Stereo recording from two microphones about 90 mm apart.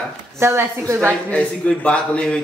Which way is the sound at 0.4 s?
30° right (ahead or behind).